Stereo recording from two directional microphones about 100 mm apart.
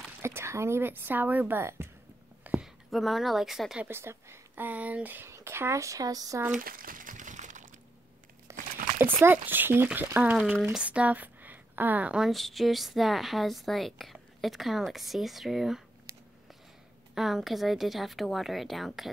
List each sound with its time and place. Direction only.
0.2 s speech: 25° right (ahead or behind)
2.4 s a sound: 15° right (ahead or behind)
2.9 s a woman's voice: centre (ahead or behind)
3.8 s speech: 25° right (ahead or behind)
8.5 s crumpling: 25° right (ahead or behind)
10.0 s speech: 20° right (ahead or behind)
10.6 s speech: 10° right (ahead or behind)
12.3 s a woman's voice: centre (ahead or behind)
16.1 s a sound: 30° right (ahead or behind)
17.1 s a woman's voice: 5° right (ahead or behind)